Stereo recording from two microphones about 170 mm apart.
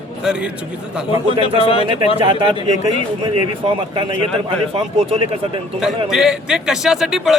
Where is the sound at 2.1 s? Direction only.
30° right (ahead or behind).